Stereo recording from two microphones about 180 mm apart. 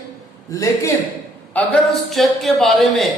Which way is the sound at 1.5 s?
5° left (ahead or behind).